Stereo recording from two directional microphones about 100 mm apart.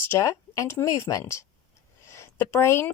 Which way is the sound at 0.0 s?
25° left (ahead or behind).